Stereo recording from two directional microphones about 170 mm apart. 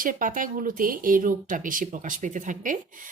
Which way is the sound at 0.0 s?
55° right (ahead or behind).